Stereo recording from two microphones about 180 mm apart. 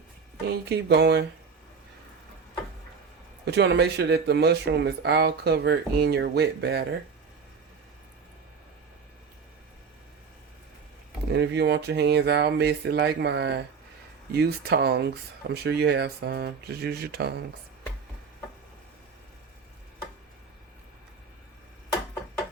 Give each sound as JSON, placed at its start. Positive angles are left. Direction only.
{"t": 0.4, "sound": "speech", "side_deg": -65}
{"t": 3.4, "sound": "speech", "side_deg": -75}
{"t": 11.3, "sound": "speech", "side_deg": -70}